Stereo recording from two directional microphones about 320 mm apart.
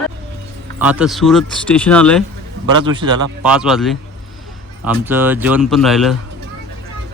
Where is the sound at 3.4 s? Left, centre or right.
Centre.